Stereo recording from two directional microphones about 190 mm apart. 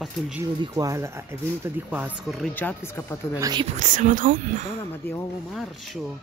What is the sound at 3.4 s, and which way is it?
Speech, 20° right (ahead or behind).